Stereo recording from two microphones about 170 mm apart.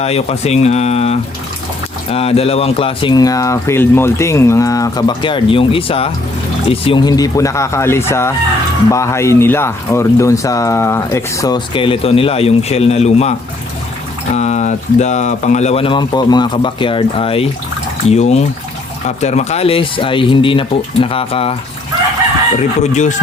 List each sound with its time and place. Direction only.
0.0 s speech: 40° left (ahead or behind)
14.3 s speech: 40° left (ahead or behind)
22.5 s speech: 45° left (ahead or behind)